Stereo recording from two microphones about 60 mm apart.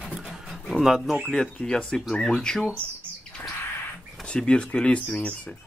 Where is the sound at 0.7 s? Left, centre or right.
Centre.